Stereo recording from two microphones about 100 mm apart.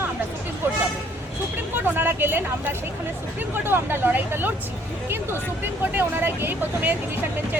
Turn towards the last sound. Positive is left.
turn(degrees=-20)  # may be behind; listen again after turning